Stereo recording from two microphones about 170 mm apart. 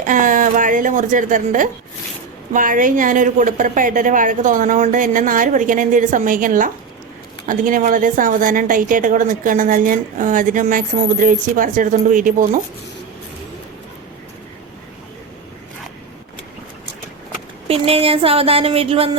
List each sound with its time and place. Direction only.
0.0 s a woman's voice: 50° right (ahead or behind)
17.7 s speech: 35° right (ahead or behind)